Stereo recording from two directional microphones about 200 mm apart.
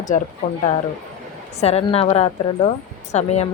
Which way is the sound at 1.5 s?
30° left (ahead or behind).